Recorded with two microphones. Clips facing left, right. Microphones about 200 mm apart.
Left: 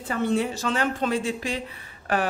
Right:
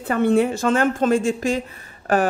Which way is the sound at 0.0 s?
60° right (ahead or behind).